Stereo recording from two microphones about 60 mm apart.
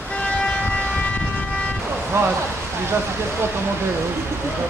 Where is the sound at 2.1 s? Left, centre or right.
Right.